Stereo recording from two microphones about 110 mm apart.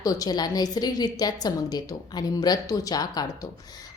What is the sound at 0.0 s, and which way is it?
A woman's voice, 35° left (ahead or behind).